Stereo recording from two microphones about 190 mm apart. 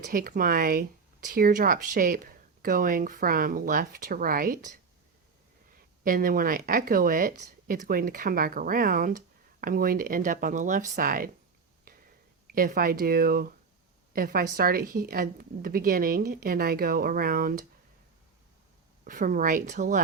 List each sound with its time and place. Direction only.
0.0 s speech: 50° right (ahead or behind)
6.1 s speech: 50° right (ahead or behind)
11.9 s a sound: 50° right (ahead or behind)
12.5 s a woman's voice: 50° right (ahead or behind)
19.0 s speech: 45° right (ahead or behind)